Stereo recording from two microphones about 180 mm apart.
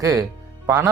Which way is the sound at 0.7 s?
15° right (ahead or behind).